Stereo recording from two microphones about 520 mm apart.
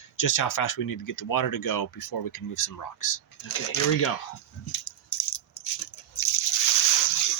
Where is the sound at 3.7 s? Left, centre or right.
Left.